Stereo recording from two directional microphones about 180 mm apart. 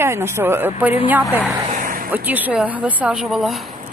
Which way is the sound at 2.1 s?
10° right (ahead or behind).